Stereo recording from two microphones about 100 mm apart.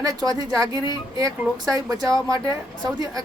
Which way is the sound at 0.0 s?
40° right (ahead or behind).